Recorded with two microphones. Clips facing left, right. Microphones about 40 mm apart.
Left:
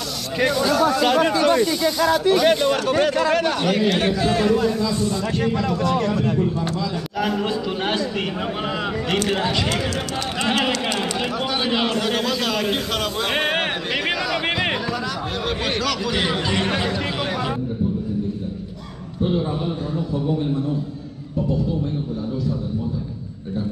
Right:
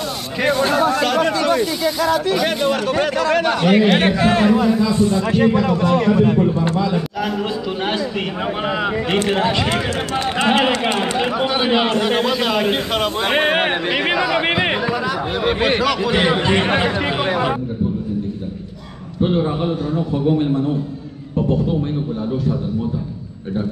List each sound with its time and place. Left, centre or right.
0.5 s a man's voice: right
1.1 s a man's voice: centre
3.4 s a man's voice: right
4.5 s speech: centre
7.2 s a man's voice: centre
9.1 s a man's voice: centre
19.2 s a man's voice: right